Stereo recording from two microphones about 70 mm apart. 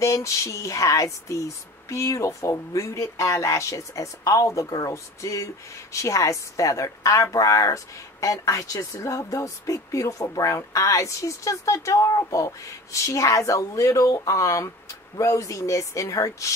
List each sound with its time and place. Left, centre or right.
0.0 s a woman's voice: left